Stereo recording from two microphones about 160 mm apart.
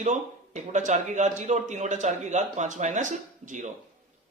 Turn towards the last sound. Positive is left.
turn(degrees=-50)  # may be behind; listen again after turning